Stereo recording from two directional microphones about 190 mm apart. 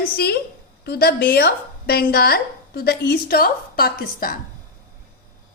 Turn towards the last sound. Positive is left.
turn(degrees=50)  # may be behind; listen again after turning